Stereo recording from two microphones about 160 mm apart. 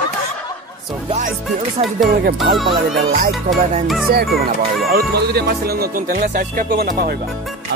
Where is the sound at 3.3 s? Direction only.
Centre (ahead or behind).